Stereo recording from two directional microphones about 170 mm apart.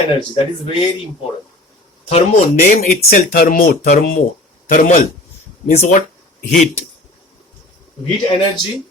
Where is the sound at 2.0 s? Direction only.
40° left (ahead or behind).